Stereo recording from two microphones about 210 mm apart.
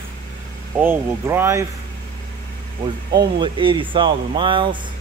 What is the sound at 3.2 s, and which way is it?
Speech, 25° right (ahead or behind).